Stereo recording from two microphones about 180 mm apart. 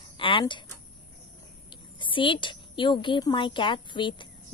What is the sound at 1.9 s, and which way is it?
A woman's voice, 25° left (ahead or behind).